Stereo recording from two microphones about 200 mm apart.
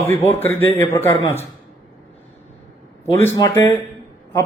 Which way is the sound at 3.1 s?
15° left (ahead or behind).